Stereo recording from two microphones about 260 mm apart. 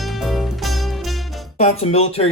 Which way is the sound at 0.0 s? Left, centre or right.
Centre.